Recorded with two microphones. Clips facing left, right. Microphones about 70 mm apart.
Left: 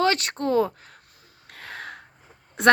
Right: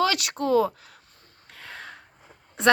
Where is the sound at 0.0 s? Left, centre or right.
Left.